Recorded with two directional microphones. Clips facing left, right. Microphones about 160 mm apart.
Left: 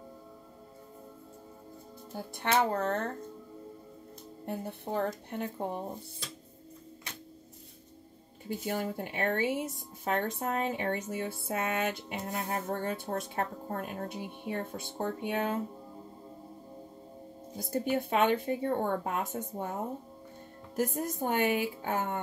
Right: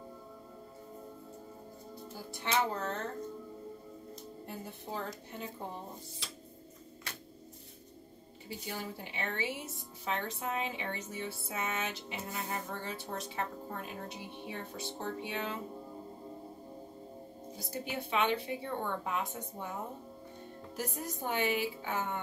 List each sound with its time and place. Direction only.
2.1 s a woman's voice: 55° left (ahead or behind)
4.5 s a woman's voice: 60° left (ahead or behind)
8.5 s speech: 50° left (ahead or behind)
17.6 s speech: 50° left (ahead or behind)